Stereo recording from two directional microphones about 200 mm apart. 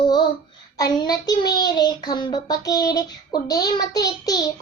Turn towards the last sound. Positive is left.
turn(degrees=20)  # may be behind; listen again after turning